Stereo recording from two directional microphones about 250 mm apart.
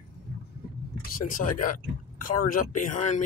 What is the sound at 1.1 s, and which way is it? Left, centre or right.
Speech, left.